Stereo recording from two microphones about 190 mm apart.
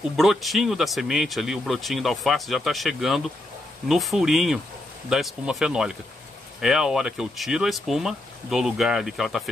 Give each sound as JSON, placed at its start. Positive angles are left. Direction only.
{"t": 0.2, "sound": "speech", "side_deg": 0}